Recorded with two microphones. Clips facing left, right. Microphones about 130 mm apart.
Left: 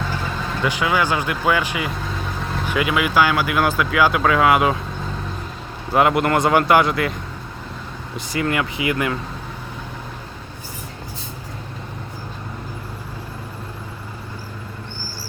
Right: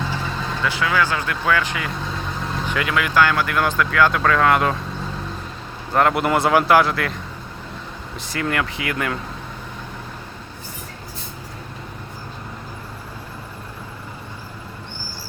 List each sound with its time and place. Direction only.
0.6 s speech: 15° left (ahead or behind)
5.9 s speech: 5° left (ahead or behind)
8.3 s speech: 5° left (ahead or behind)